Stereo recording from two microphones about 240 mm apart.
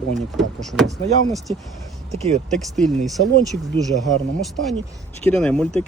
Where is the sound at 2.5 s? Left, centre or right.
Centre.